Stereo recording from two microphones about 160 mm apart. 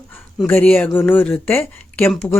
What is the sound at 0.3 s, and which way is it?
Speech, 10° left (ahead or behind).